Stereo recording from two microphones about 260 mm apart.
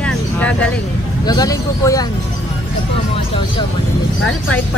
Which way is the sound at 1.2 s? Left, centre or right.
Centre.